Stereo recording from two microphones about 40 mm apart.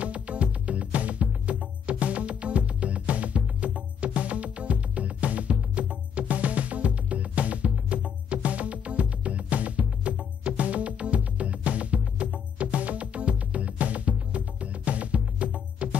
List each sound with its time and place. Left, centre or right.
0.0 s music: right